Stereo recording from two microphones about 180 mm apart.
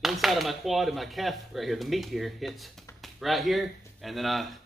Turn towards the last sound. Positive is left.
turn(degrees=0)  # may be behind; listen again after turning